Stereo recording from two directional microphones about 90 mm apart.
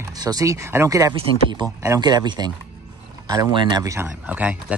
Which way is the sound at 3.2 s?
40° right (ahead or behind).